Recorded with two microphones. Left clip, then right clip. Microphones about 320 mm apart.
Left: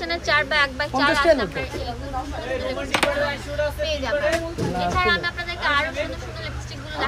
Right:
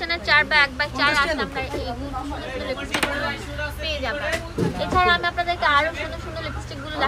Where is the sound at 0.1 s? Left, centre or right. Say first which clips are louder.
Right 3 dB; centre.